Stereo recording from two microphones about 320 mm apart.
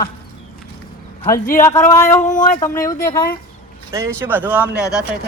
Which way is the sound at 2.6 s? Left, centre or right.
Centre.